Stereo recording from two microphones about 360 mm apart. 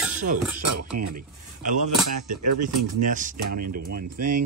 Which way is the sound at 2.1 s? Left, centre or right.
Right.